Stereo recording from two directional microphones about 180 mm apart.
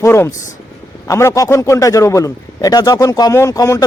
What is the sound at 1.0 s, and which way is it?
A man's voice, 15° left (ahead or behind).